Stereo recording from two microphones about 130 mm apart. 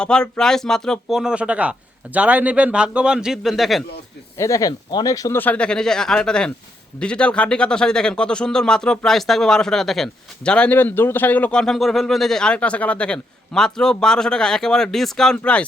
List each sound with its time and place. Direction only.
0.0 s a man's voice: 5° left (ahead or behind)
4.4 s speech: 25° left (ahead or behind)
5.4 s a man's voice: 10° left (ahead or behind)